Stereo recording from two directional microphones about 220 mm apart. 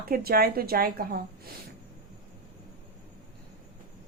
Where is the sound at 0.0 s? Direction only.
45° right (ahead or behind).